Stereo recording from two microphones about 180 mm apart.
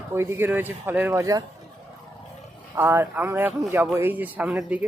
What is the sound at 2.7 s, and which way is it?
A man's voice, 15° right (ahead or behind).